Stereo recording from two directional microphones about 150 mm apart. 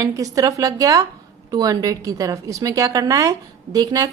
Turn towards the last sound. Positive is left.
turn(degrees=-25)  # may be behind; listen again after turning